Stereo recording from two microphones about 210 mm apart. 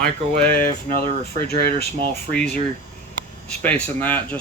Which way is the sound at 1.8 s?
25° right (ahead or behind).